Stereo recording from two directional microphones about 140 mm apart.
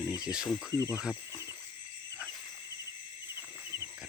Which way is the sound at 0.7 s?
20° left (ahead or behind).